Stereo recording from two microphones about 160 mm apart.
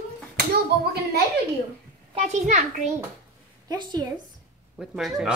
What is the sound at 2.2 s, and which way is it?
Speech, 45° right (ahead or behind).